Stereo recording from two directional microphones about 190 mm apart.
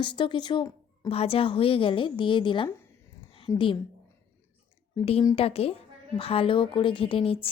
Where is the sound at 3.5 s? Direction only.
40° left (ahead or behind).